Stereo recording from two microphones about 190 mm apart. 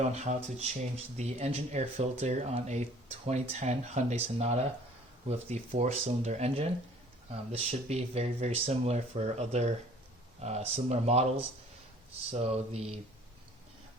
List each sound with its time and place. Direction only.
0.0 s speech: 35° right (ahead or behind)
12.3 s speech: 35° right (ahead or behind)